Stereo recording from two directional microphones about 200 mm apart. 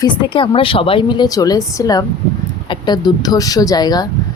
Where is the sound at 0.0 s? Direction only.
25° left (ahead or behind).